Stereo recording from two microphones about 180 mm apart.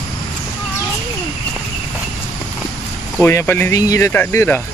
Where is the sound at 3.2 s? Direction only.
15° left (ahead or behind).